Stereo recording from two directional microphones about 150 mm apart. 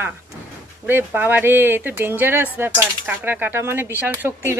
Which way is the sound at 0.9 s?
15° right (ahead or behind).